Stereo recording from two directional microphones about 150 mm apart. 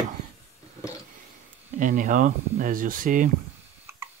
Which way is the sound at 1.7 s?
60° right (ahead or behind).